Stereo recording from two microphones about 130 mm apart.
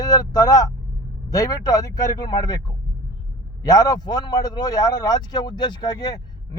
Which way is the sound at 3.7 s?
30° left (ahead or behind).